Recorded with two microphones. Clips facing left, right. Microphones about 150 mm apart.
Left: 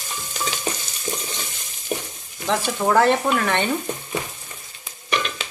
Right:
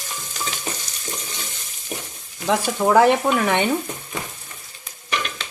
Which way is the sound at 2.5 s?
5° right (ahead or behind).